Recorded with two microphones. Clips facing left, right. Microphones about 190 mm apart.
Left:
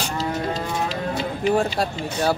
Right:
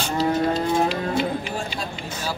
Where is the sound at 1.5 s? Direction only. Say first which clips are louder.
Left 8 dB; 65° left (ahead or behind).